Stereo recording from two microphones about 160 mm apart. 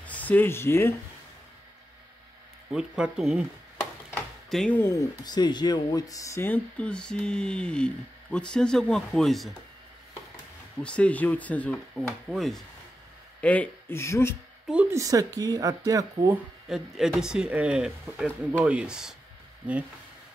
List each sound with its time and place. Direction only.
0.0 s speech: 10° left (ahead or behind)
2.7 s speech: 5° right (ahead or behind)
4.1 s a sound: centre (ahead or behind)
4.8 s speech: 20° left (ahead or behind); by 9.5 s centre (ahead or behind)
10.8 s speech: 5° left (ahead or behind)
14.7 s a woman's voice: 10° right (ahead or behind)
15.0 s speech: 20° right (ahead or behind)
16.6 s speech: 5° right (ahead or behind)